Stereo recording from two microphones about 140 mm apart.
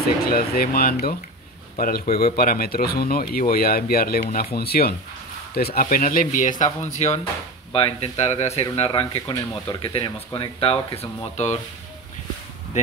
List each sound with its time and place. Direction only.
0.2 s speech: 90° left; by 7.2 s 55° left (ahead or behind)
7.7 s speech: 45° left (ahead or behind)
8.7 s speech: 40° left (ahead or behind)
9.3 s speech: 25° left (ahead or behind)
9.8 s speech: 40° left (ahead or behind)
11.3 s speech: 55° left (ahead or behind)